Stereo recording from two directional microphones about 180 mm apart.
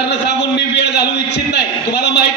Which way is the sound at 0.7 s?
70° left (ahead or behind).